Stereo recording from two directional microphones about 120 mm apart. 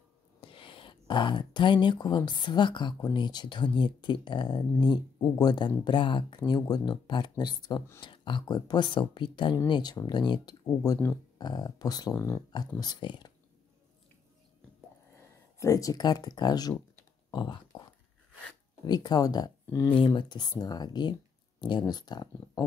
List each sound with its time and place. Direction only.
0.4 s speech: 45° left (ahead or behind)
10.6 s speech: 25° left (ahead or behind)
11.3 s speech: 35° left (ahead or behind)
15.6 s speech: 30° left (ahead or behind)
17.3 s a sound: 40° left (ahead or behind)
18.9 s speech: 35° left (ahead or behind)
20.1 s speech: 40° left (ahead or behind)